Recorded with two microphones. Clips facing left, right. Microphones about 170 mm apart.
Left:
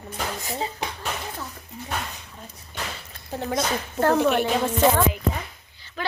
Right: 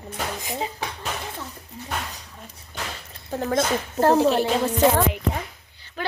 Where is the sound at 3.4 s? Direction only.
50° right (ahead or behind).